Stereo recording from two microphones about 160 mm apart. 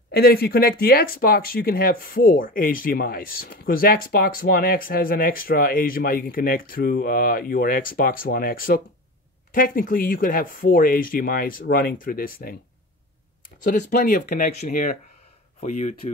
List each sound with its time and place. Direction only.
0.1 s speech: 75° left (ahead or behind)
13.7 s speech: 50° left (ahead or behind)
15.6 s speech: 40° left (ahead or behind)